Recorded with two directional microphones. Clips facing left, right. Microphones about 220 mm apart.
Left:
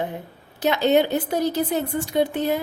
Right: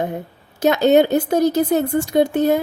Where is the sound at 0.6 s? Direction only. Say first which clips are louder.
Right 5 dB; 45° right (ahead or behind).